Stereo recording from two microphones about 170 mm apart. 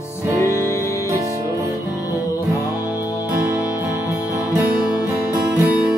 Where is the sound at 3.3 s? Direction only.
15° right (ahead or behind).